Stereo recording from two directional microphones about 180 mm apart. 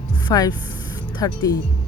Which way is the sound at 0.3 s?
20° left (ahead or behind).